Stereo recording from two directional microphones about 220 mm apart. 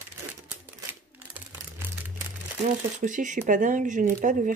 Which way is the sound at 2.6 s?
35° right (ahead or behind).